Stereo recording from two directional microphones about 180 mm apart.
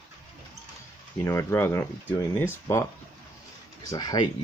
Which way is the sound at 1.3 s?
15° left (ahead or behind).